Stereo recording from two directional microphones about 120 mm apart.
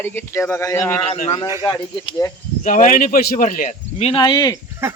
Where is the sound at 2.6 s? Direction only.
90° left.